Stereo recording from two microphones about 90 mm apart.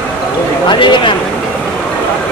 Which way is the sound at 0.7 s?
65° left (ahead or behind).